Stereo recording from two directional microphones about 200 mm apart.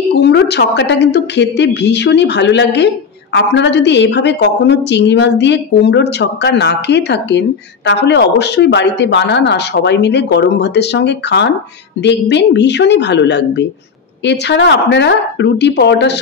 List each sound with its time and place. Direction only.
0.1 s a woman's voice: 55° left (ahead or behind)